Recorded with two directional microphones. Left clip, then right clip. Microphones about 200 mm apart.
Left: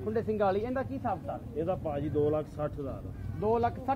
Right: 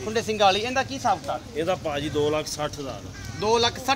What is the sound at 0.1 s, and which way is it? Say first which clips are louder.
Speech: right 8 dB; 15° left (ahead or behind).